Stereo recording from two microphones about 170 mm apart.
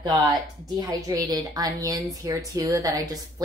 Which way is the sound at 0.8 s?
20° right (ahead or behind).